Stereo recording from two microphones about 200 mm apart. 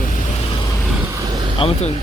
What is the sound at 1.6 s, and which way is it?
Speech, 30° left (ahead or behind).